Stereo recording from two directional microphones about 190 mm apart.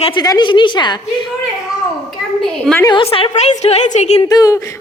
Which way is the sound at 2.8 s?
25° left (ahead or behind).